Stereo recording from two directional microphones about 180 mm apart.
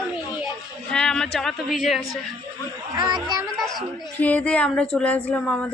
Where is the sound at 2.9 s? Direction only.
25° right (ahead or behind).